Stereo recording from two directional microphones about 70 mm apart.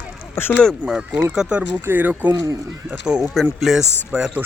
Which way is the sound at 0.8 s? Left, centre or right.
Centre.